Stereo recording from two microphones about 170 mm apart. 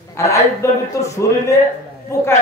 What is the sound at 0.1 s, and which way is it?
Speech, 15° left (ahead or behind).